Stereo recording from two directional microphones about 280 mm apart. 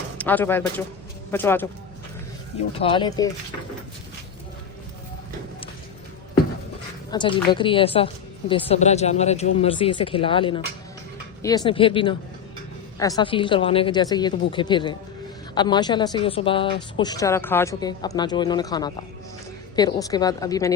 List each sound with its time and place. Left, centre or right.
0.2 s a man's voice: centre
2.7 s speech: centre
7.1 s a woman's voice: centre